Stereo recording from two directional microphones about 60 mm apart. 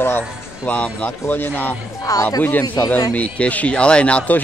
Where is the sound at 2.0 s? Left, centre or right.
Left.